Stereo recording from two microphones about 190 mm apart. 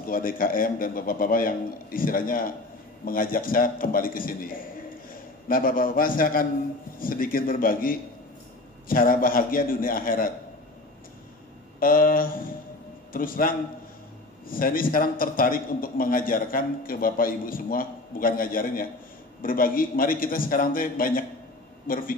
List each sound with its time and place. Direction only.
0.0 s a man's voice: 50° left (ahead or behind)
11.8 s a man's voice: 50° left (ahead or behind)